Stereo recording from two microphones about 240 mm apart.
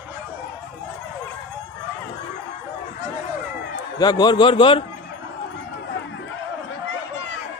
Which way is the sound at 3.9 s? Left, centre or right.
Centre.